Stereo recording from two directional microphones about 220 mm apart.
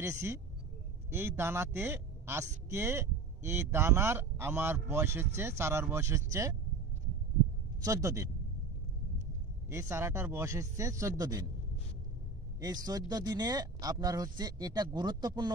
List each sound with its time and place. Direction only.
0.0 s speech: 15° right (ahead or behind)
7.8 s speech: 15° right (ahead or behind)
9.7 s speech: 10° right (ahead or behind)
13.1 s speech: 15° right (ahead or behind)